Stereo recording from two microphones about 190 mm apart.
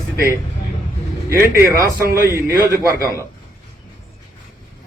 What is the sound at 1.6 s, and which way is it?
A man's voice, 15° right (ahead or behind).